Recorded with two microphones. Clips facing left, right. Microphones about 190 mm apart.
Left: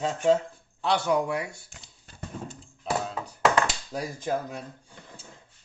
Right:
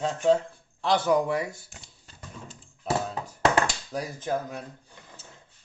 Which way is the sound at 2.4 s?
50° left (ahead or behind).